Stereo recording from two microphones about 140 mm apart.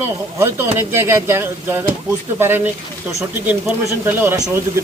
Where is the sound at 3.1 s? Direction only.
20° right (ahead or behind).